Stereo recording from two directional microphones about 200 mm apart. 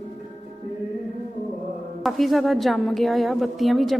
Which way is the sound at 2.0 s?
Centre (ahead or behind).